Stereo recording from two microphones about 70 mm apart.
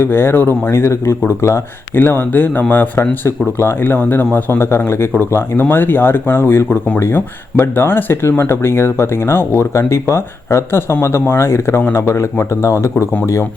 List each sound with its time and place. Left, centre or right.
0.0 s speech: left
3.0 s speech: left